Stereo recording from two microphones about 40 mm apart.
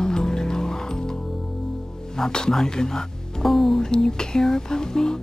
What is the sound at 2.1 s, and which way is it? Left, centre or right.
Speech, centre.